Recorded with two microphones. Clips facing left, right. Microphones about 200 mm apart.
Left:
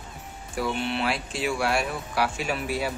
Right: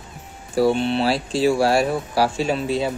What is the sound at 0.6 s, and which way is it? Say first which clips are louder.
Speech: right 9 dB; 30° right (ahead or behind).